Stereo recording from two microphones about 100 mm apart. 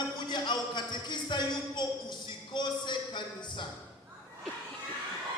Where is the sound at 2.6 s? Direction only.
50° left (ahead or behind).